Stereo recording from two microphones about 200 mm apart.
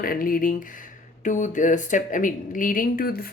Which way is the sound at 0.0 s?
45° left (ahead or behind).